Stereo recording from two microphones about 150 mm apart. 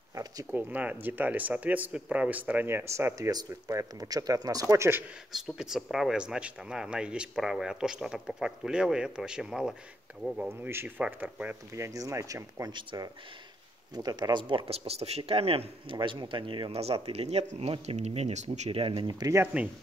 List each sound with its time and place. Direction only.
0.1 s speech: 20° right (ahead or behind)
0.6 s speech: 10° right (ahead or behind)
5.3 s speech: 5° right (ahead or behind)
11.7 s speech: 20° right (ahead or behind)
14.7 s speech: 45° right (ahead or behind); by 19.4 s 25° right (ahead or behind)
19.4 s speech: 10° right (ahead or behind)